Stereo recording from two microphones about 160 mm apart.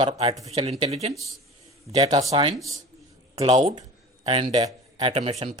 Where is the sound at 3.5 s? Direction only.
25° right (ahead or behind).